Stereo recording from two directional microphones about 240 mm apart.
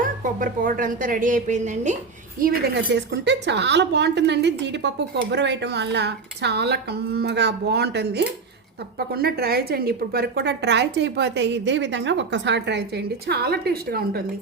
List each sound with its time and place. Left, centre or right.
0.0 s a woman's voice: right
2.4 s a woman's voice: right